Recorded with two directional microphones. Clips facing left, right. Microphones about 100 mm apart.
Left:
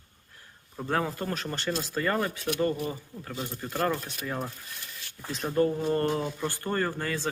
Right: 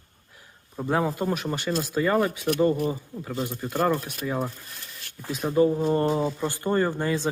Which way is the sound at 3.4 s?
5° right (ahead or behind).